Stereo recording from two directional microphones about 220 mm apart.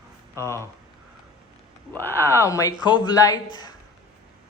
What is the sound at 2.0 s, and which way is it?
A man's voice, 10° left (ahead or behind).